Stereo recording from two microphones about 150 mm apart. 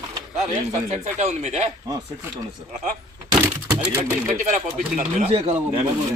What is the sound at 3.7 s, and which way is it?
Speech, 5° right (ahead or behind).